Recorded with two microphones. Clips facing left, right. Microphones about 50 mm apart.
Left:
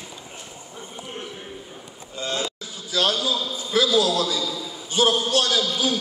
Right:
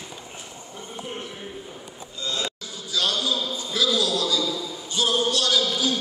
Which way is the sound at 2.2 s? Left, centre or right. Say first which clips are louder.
Left 2 dB; left.